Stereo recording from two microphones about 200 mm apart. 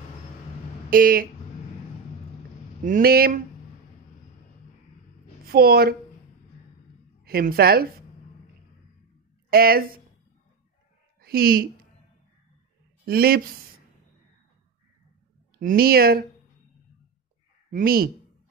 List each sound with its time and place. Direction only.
0.8 s speech: 45° right (ahead or behind)
2.8 s a woman's voice: 45° right (ahead or behind)
5.5 s a woman's voice: 50° right (ahead or behind)
7.2 s a woman's voice: 50° right (ahead or behind)
9.5 s a woman's voice: 50° right (ahead or behind)
11.1 s speech: 50° right (ahead or behind)
13.0 s speech: 50° right (ahead or behind)
15.6 s a woman's voice: 50° right (ahead or behind)
17.6 s speech: 45° right (ahead or behind)